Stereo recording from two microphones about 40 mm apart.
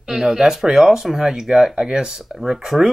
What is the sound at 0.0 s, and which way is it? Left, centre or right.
Speech, centre.